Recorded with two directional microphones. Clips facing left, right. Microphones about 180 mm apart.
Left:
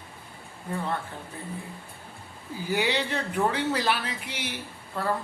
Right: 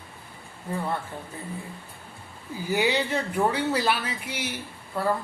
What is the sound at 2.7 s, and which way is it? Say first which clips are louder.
A man's voice: right 2 dB; 10° right (ahead or behind).